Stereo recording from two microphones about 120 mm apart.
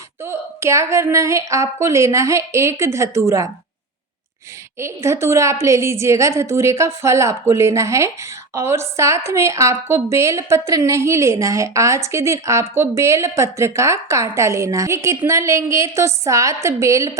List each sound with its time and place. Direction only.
0.2 s a woman's voice: 20° right (ahead or behind)
4.8 s a woman's voice: 25° right (ahead or behind)